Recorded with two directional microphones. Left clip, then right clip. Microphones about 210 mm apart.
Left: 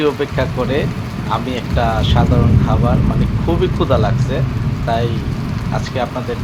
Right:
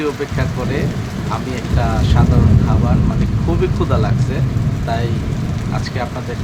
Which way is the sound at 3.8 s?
15° left (ahead or behind).